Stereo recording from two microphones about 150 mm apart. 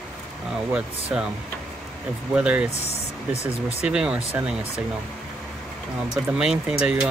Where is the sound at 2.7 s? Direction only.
45° left (ahead or behind).